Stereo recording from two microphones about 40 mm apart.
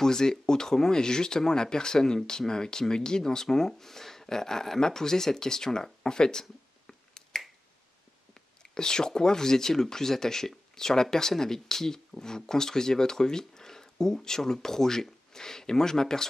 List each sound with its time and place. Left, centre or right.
0.0 s speech: centre
6.9 s finger snapping: centre
8.7 s speech: centre